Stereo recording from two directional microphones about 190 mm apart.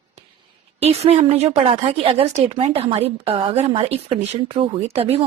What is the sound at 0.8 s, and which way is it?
A woman's voice, 35° right (ahead or behind).